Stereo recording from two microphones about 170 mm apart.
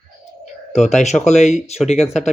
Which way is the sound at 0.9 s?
45° left (ahead or behind).